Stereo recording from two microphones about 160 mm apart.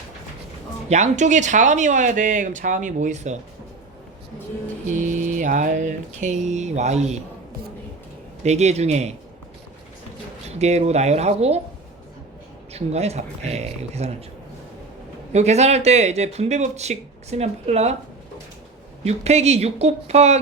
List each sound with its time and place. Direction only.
0.9 s speech: 45° right (ahead or behind)
4.9 s speech: 50° right (ahead or behind)
8.4 s speech: 45° right (ahead or behind)
10.6 s speech: 45° right (ahead or behind)
12.7 s speech: 40° right (ahead or behind)
15.3 s speech: 45° right (ahead or behind)
19.0 s speech: 40° right (ahead or behind)